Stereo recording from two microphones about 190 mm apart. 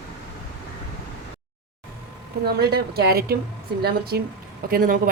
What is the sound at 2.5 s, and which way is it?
Speech, 55° right (ahead or behind).